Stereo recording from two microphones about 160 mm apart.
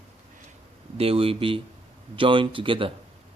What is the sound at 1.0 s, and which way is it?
Speech, 35° right (ahead or behind).